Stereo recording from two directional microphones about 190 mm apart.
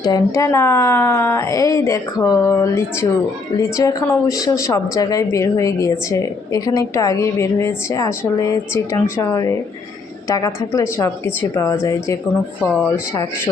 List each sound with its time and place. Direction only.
0.0 s a woman's voice: 20° left (ahead or behind)